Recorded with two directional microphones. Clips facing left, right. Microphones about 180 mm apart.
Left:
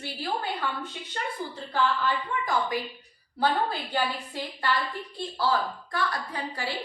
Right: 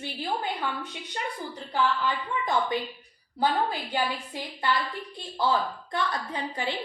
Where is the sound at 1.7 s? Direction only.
20° right (ahead or behind).